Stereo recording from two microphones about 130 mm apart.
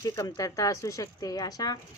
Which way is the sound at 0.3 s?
25° left (ahead or behind).